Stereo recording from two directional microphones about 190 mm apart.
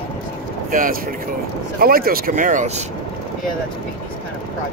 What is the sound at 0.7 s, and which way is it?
Speech, 45° right (ahead or behind).